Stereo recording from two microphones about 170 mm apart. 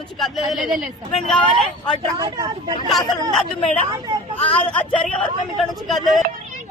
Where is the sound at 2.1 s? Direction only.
25° right (ahead or behind).